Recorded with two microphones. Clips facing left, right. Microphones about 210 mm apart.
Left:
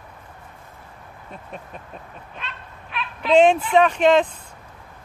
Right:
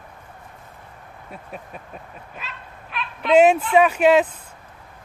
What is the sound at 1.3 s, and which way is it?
Dog, 5° right (ahead or behind).